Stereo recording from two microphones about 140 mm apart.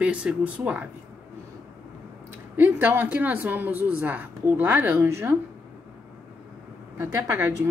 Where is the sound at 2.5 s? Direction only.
15° right (ahead or behind).